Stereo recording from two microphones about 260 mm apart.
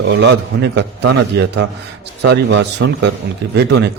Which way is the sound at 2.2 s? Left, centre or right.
Right.